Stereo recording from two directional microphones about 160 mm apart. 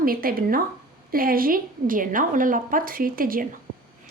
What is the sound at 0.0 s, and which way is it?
A woman's voice, 65° right (ahead or behind).